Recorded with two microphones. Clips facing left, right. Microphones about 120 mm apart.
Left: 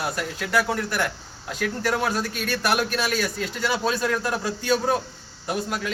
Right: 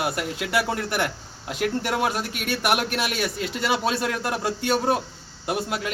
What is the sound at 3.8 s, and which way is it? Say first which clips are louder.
Speech: left 1 dB; 20° right (ahead or behind).